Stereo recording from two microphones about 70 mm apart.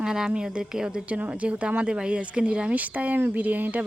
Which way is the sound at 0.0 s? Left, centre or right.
Centre.